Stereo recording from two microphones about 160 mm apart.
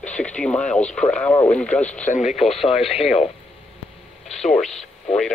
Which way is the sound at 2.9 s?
40° left (ahead or behind).